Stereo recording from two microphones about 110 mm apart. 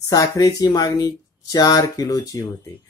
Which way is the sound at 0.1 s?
30° left (ahead or behind).